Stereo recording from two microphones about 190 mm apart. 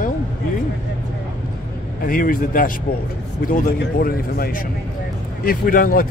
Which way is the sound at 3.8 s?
55° left (ahead or behind).